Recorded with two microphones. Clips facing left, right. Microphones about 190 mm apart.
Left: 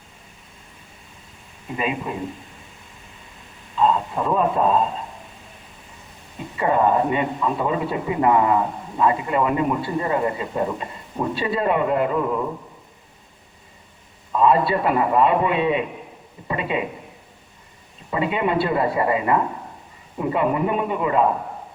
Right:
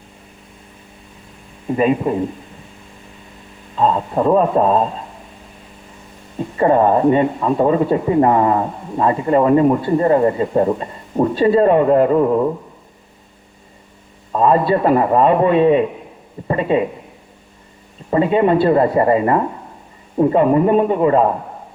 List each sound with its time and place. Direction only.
1.7 s speech: 40° right (ahead or behind)
3.8 s speech: 40° right (ahead or behind)
6.6 s speech: 40° right (ahead or behind)
14.3 s speech: 45° right (ahead or behind)
18.1 s speech: 40° right (ahead or behind)